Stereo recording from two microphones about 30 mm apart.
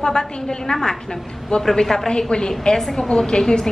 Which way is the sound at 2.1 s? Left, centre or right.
Left.